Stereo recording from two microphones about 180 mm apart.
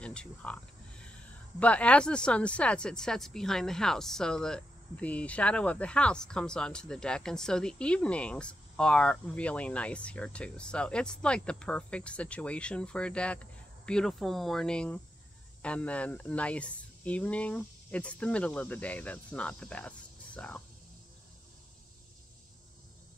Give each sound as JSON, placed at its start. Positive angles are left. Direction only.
{"t": 0.0, "sound": "speech", "side_deg": 5}